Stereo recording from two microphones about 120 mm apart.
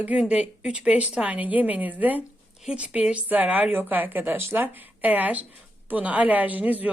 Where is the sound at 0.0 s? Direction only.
10° right (ahead or behind).